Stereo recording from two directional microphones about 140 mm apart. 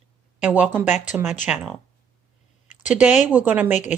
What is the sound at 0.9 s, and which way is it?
Speech, 55° left (ahead or behind).